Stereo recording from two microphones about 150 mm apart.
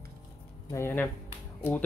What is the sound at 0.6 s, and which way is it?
Speech, 15° left (ahead or behind).